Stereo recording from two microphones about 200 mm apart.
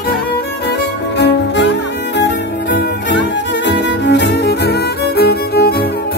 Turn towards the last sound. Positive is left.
turn(degrees=50)  # may be behind; listen again after turning